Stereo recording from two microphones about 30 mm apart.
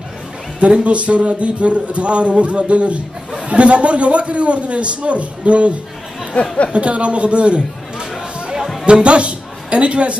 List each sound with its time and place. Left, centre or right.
0.6 s a man's voice: right
6.4 s speech: left
6.7 s a man's voice: right
8.8 s a man's voice: right